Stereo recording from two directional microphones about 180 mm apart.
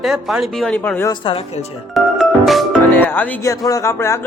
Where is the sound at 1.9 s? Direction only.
Centre (ahead or behind).